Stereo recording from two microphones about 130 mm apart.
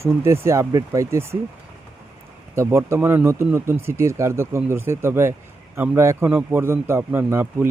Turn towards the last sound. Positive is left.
turn(degrees=-20)  # may be behind; listen again after turning